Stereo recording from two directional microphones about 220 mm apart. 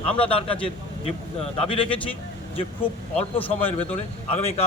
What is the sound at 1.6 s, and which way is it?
Speech, 25° left (ahead or behind).